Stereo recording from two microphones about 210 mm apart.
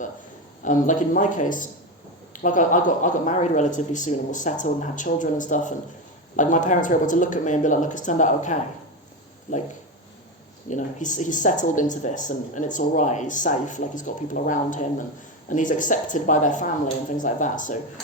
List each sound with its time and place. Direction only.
0.6 s speech: 35° left (ahead or behind)
10.7 s speech: 35° left (ahead or behind)